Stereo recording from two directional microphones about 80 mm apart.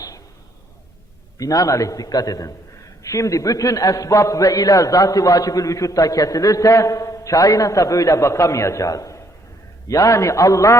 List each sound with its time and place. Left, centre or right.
1.4 s a man's voice: left